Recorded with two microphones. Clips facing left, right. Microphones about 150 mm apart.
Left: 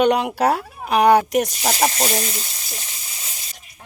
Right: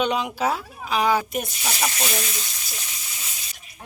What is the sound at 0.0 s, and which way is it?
A woman's voice, 60° left (ahead or behind).